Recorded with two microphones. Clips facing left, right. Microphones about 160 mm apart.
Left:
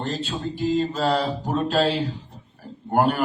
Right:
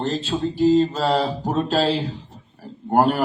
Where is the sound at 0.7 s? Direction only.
30° right (ahead or behind).